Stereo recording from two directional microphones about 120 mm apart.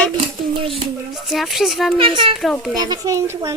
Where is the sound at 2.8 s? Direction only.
30° right (ahead or behind).